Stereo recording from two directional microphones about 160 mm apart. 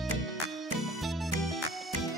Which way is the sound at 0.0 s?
Centre (ahead or behind).